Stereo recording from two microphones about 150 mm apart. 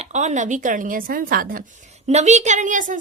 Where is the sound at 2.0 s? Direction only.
50° right (ahead or behind).